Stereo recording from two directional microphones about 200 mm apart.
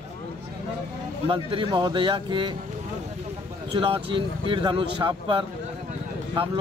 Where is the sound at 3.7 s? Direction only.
25° right (ahead or behind).